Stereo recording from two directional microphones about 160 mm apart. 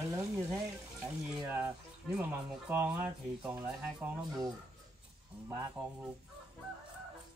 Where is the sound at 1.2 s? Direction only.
10° right (ahead or behind).